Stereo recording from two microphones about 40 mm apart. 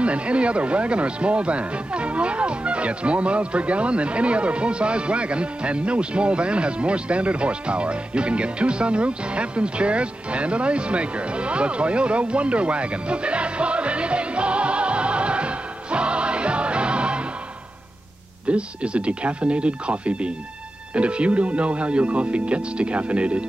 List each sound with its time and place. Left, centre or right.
0.0 s speech: right
18.5 s speech: right